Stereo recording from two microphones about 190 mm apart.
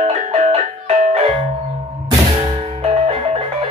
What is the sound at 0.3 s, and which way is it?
Music, 35° right (ahead or behind).